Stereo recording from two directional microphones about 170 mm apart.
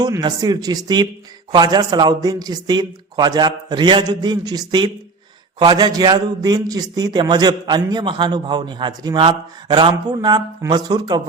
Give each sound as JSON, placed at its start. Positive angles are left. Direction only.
{"t": 0.0, "sound": "a man's voice", "side_deg": -25}